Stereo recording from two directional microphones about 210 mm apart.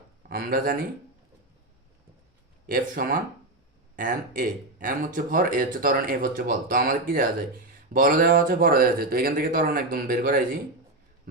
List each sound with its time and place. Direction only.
0.3 s speech: 45° right (ahead or behind)
2.6 s speech: 40° right (ahead or behind)